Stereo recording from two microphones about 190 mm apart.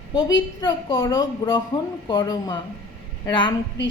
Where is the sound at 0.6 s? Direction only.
25° left (ahead or behind).